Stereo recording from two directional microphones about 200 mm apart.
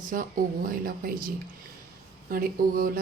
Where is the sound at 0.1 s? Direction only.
45° right (ahead or behind).